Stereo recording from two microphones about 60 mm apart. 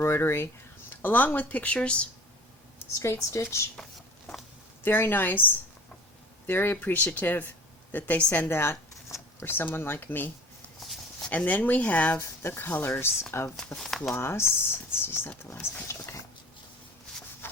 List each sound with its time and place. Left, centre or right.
0.0 s speech: left
0.9 s speech: left
3.0 s speech: left
4.8 s speech: left
8.4 s speech: left
12.2 s speech: left
13.7 s speech: centre
14.1 s speech: left
17.4 s rub: left